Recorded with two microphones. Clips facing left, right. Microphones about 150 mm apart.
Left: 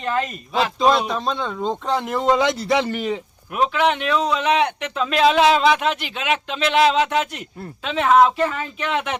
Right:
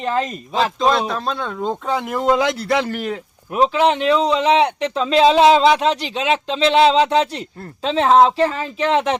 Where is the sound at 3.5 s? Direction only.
30° right (ahead or behind).